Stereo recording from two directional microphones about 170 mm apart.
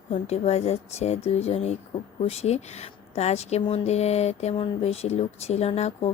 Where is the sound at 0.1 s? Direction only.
40° left (ahead or behind).